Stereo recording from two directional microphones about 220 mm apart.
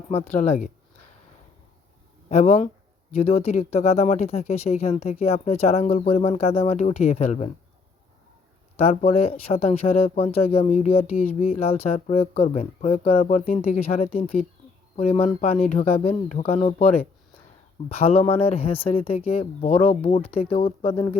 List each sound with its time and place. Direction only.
0.1 s speech: 30° left (ahead or behind)
2.3 s speech: 30° left (ahead or behind)
8.7 s speech: 30° left (ahead or behind)